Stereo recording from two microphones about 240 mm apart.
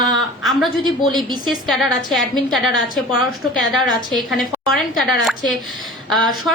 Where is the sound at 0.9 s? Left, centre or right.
Centre.